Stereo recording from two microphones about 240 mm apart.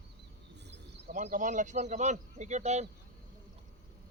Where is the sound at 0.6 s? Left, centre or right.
Right.